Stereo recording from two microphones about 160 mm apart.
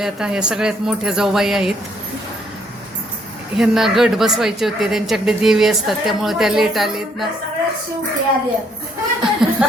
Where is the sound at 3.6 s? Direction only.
Centre (ahead or behind).